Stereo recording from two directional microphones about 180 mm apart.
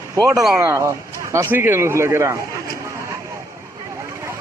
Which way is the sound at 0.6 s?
15° right (ahead or behind).